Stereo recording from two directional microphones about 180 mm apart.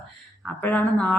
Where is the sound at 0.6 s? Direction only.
10° left (ahead or behind).